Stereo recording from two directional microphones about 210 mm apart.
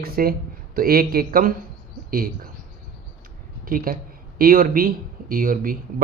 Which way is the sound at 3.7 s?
40° right (ahead or behind).